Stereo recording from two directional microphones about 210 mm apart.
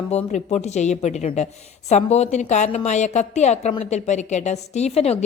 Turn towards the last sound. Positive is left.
turn(degrees=30)  # may be behind; listen again after turning